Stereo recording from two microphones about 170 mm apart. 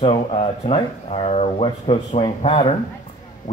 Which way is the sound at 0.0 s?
35° left (ahead or behind).